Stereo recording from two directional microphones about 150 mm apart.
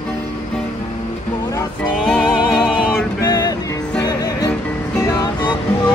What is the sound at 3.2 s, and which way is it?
Music, 25° left (ahead or behind).